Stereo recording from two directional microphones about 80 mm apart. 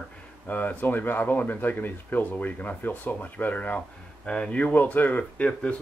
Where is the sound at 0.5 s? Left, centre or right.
Left.